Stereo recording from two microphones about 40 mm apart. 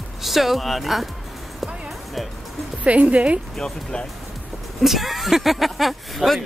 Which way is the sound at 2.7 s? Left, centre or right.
Right.